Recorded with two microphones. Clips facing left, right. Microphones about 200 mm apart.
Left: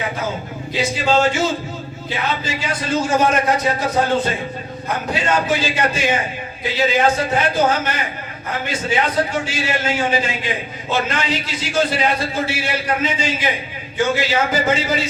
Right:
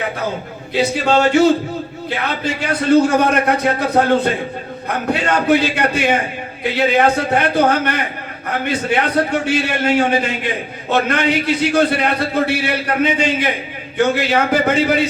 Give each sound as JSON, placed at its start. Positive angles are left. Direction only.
{"t": 0.8, "sound": "a man's voice", "side_deg": -65}